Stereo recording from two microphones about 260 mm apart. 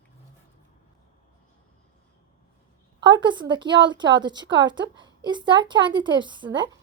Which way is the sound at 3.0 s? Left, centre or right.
Centre.